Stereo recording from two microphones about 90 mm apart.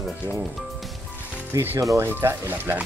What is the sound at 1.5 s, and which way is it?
Speech, 30° right (ahead or behind).